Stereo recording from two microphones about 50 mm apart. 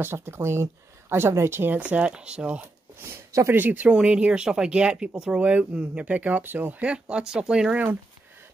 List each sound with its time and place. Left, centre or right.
0.0 s speech: right
1.7 s speech: right
3.0 s speech: right
3.5 s speech: right
3.9 s speech: right
5.4 s speech: right
6.8 s speech: right
7.7 s speech: right